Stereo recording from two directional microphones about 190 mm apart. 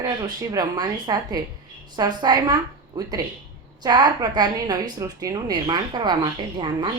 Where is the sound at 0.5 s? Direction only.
20° right (ahead or behind).